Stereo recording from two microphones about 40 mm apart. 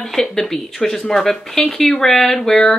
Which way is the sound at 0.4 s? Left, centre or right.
Centre.